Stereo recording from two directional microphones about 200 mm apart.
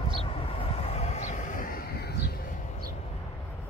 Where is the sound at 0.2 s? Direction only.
30° left (ahead or behind); by 2.1 s 50° left (ahead or behind).